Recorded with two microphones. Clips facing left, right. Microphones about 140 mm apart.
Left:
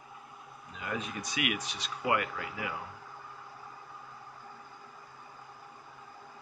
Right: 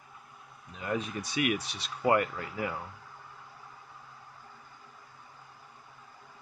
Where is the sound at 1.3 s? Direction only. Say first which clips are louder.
Right 5 dB; 40° right (ahead or behind).